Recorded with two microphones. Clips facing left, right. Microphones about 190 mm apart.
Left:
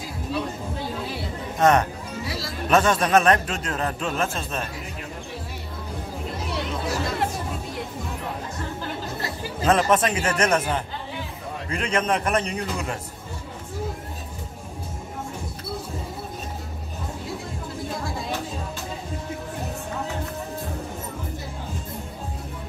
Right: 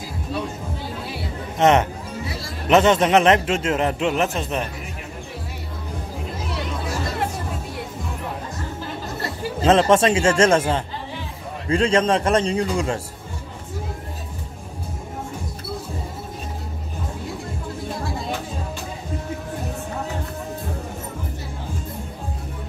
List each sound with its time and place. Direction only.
1.6 s a man's voice: 20° right (ahead or behind)
9.6 s a man's voice: 25° right (ahead or behind)